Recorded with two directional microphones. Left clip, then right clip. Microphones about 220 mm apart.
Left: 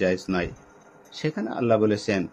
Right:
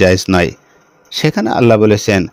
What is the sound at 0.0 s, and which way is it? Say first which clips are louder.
Speech: right 14 dB; 50° right (ahead or behind).